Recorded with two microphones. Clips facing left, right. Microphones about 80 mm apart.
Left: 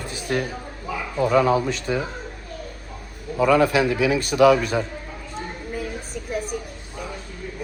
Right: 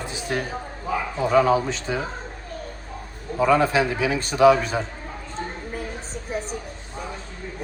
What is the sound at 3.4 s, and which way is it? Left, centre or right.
A man's voice, right.